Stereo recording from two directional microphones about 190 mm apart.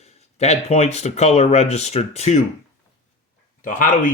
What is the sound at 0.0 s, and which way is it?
Speech, 35° left (ahead or behind).